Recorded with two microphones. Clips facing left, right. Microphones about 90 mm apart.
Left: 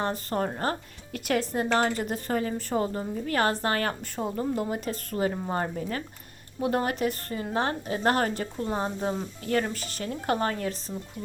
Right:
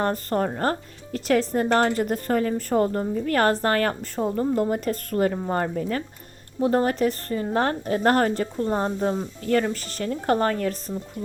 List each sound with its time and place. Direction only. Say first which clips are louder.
0.0 s a woman's voice: right 5 dB; 40° right (ahead or behind)